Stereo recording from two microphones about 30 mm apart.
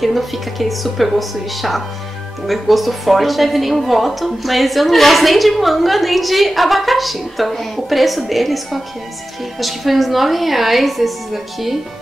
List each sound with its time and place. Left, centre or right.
0.0 s a woman's voice: centre